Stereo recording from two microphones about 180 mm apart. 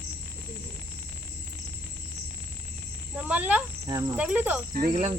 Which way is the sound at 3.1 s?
10° right (ahead or behind).